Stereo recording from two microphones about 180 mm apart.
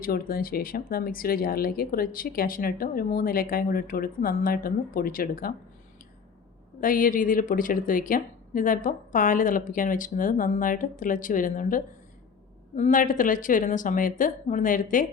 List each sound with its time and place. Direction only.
0.0 s speech: 55° left (ahead or behind)
6.8 s speech: 50° left (ahead or behind)